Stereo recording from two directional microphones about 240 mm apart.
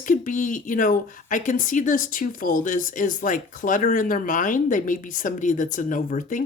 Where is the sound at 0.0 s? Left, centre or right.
Left.